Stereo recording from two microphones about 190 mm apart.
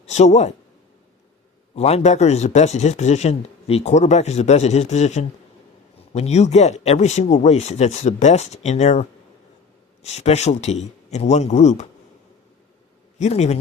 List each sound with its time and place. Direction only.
0.0 s speech: 35° left (ahead or behind)
1.7 s speech: 35° left (ahead or behind)
13.1 s a man's voice: 35° left (ahead or behind)